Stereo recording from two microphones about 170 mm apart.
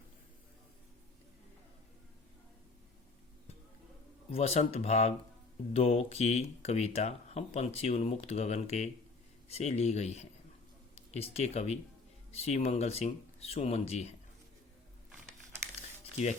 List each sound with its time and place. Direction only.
4.3 s speech: 35° left (ahead or behind)